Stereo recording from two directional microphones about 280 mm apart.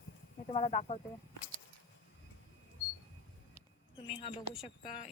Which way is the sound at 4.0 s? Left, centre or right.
Centre.